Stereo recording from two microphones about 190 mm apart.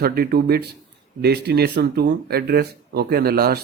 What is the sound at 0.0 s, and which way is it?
Speech, 55° right (ahead or behind).